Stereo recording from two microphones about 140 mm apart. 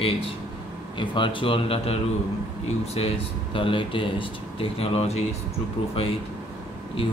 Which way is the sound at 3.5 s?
35° left (ahead or behind).